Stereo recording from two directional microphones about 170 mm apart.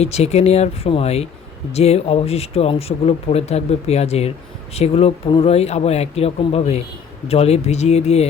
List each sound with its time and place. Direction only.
0.0 s speech: 40° left (ahead or behind)